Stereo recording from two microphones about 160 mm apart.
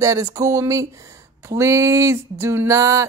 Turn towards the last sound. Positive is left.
turn(degrees=-20)  # may be behind; listen again after turning